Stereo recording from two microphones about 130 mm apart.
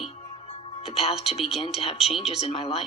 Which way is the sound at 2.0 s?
Centre (ahead or behind).